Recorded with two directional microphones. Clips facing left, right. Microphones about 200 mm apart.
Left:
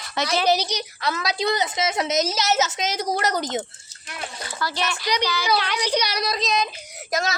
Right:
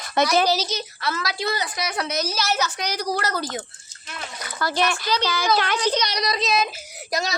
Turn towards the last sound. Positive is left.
turn(degrees=0)  # may be behind; listen again after turning